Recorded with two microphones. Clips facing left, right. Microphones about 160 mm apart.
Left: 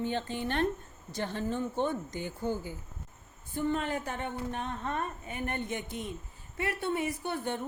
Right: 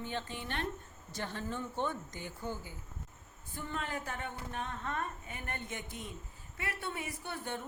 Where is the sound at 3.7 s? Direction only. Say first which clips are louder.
Left 7 dB; 20° left (ahead or behind).